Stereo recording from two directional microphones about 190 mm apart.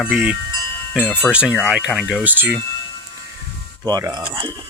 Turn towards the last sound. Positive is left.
turn(degrees=-25)  # may be behind; listen again after turning